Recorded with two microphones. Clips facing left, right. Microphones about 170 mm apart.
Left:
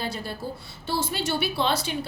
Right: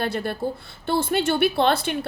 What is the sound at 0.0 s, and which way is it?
A woman's voice, 60° right (ahead or behind).